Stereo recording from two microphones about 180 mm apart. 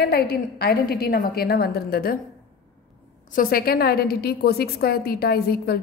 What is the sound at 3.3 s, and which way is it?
A woman's voice, 55° left (ahead or behind).